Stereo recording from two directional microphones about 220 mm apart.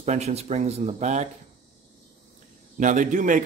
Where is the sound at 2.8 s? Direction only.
35° right (ahead or behind).